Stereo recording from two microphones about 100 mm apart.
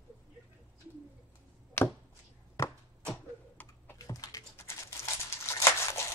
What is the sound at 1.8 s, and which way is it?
Chop, 25° left (ahead or behind).